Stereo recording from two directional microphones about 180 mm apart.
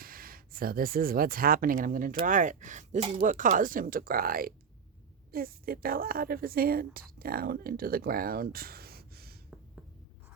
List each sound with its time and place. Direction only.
0.0 s a woman's voice: 55° right (ahead or behind)